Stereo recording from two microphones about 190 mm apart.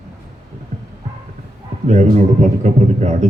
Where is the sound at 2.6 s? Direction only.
40° right (ahead or behind).